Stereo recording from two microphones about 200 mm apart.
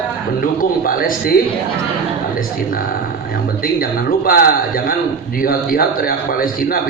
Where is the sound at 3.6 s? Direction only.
45° left (ahead or behind).